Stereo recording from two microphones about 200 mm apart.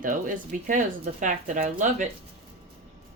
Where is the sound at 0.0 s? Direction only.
40° right (ahead or behind).